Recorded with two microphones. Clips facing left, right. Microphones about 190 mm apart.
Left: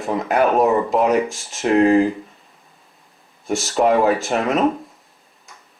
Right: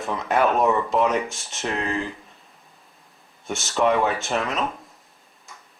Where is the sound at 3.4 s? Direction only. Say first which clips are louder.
Left 4 dB; centre (ahead or behind).